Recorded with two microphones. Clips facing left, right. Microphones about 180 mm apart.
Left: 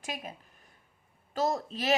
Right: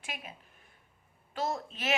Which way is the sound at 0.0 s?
40° left (ahead or behind).